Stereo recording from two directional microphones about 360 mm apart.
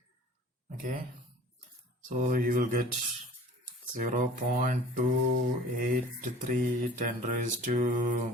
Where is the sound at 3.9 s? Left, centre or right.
Right.